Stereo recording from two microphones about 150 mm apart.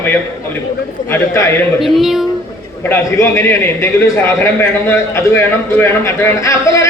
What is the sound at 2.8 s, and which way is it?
A man's voice, 15° left (ahead or behind).